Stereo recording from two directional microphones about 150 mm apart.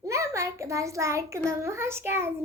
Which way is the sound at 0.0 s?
20° right (ahead or behind).